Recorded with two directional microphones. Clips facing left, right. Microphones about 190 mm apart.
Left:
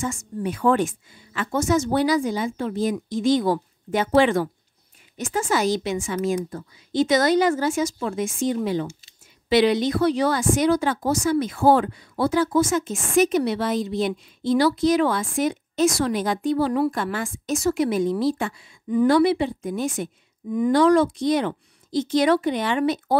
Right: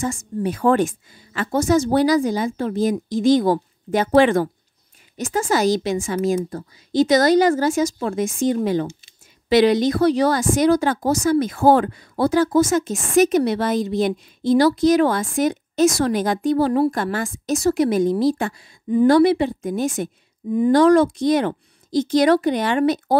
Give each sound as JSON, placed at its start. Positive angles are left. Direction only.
{"t": 0.4, "sound": "a woman's voice", "side_deg": -40}
{"t": 5.1, "sound": "a woman's voice", "side_deg": -40}